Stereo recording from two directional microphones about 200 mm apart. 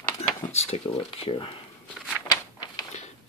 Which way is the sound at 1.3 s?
30° left (ahead or behind).